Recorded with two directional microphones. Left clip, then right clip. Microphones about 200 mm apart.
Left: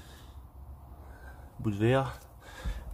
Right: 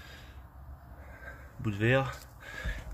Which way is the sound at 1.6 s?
20° left (ahead or behind).